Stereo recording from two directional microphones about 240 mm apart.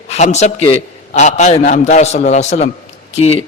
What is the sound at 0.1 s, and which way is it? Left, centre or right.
A man's voice, left.